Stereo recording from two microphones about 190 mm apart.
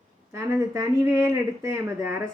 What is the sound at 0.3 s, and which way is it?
Speech, 15° right (ahead or behind).